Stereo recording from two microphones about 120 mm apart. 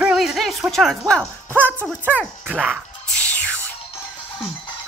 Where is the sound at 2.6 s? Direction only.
5° left (ahead or behind).